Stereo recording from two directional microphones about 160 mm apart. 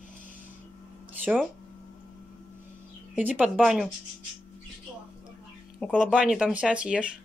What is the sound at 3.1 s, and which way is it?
Speech, 10° right (ahead or behind).